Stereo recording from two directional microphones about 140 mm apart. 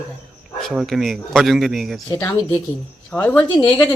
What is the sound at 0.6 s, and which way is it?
Speech, centre (ahead or behind).